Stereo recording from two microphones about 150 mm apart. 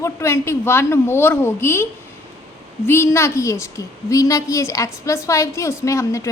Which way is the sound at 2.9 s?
20° left (ahead or behind).